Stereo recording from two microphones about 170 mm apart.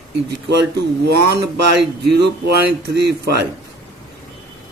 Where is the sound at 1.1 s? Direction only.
75° right (ahead or behind).